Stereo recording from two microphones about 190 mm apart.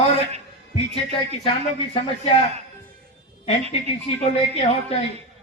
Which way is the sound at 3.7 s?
30° left (ahead or behind).